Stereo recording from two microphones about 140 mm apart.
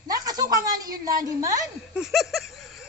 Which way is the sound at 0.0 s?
25° right (ahead or behind).